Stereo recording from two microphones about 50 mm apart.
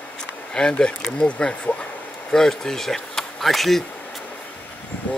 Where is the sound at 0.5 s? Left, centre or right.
Centre.